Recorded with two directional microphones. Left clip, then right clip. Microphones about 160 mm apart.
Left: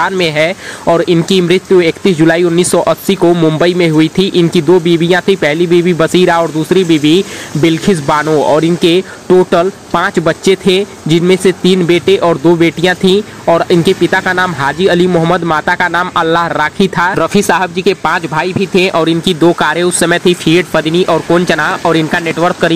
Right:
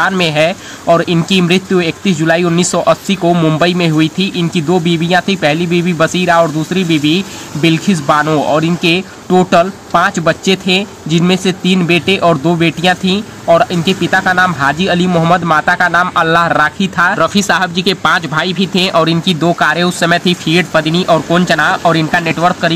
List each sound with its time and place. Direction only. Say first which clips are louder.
0.2 s speech: even; 30° left (ahead or behind)
15.0 s a man's voice: left 1 dB; 20° left (ahead or behind)
15.3 s speech: right 1 dB; 30° left (ahead or behind)